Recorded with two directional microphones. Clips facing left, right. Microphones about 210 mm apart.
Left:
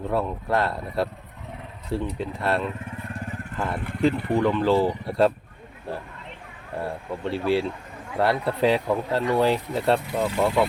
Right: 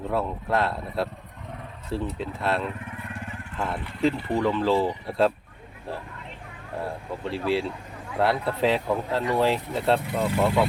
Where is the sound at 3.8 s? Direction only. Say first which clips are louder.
Left 5 dB; 50° left (ahead or behind).